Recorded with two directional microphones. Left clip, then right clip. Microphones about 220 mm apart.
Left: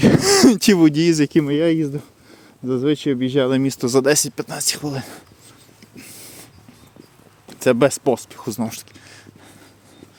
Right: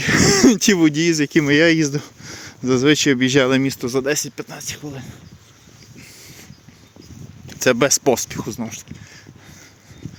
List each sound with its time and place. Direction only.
0.0 s speech: 20° left (ahead or behind)
1.4 s speech: 5° right (ahead or behind)
3.5 s speech: 5° left (ahead or behind)
3.8 s speech: 25° left (ahead or behind)
7.4 s speech: 10° left (ahead or behind)
8.4 s speech: 20° left (ahead or behind)